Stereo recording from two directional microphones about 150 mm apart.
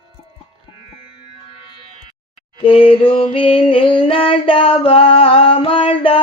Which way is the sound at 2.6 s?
35° left (ahead or behind).